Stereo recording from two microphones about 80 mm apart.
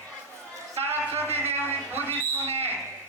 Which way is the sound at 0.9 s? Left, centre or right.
Right.